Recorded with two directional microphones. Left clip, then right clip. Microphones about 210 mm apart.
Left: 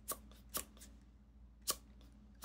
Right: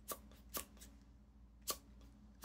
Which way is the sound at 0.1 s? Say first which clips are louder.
Left 2 dB; 20° left (ahead or behind).